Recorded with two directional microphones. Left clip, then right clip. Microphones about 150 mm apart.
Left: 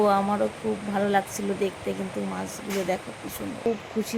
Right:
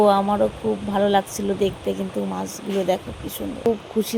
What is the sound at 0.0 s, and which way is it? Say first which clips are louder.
A woman's voice: right 5 dB; 30° right (ahead or behind).